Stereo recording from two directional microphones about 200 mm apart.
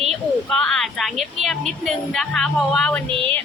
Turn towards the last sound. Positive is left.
turn(degrees=-25)  # may be behind; listen again after turning